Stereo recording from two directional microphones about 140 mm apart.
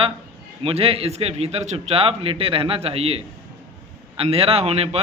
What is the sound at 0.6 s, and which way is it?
A man's voice, 45° right (ahead or behind).